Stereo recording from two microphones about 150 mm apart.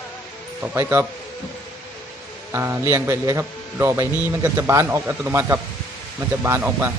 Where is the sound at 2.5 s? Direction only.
15° right (ahead or behind).